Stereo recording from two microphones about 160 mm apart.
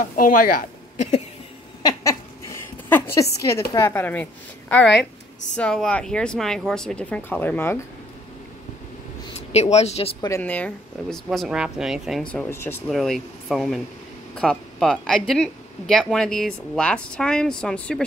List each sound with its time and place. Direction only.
0.0 s speech: 55° left (ahead or behind)
1.8 s a sound: 20° left (ahead or behind)
3.7 s speech: 15° left (ahead or behind)
9.5 s speech: 40° left (ahead or behind)
10.2 s speech: 15° left (ahead or behind)
11.2 s speech: 5° right (ahead or behind); by 12.8 s 15° left (ahead or behind)
12.8 s speech: centre (ahead or behind)